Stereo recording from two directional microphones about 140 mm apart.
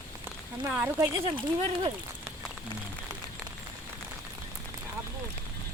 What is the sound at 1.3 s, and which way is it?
Speech, 35° right (ahead or behind).